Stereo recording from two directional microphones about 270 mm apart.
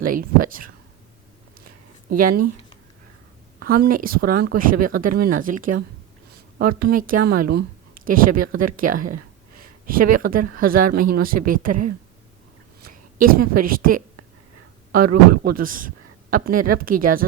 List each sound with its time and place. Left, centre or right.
0.0 s speech: right
2.0 s speech: right
3.6 s speech: right
13.1 s speech: right
15.3 s speech: right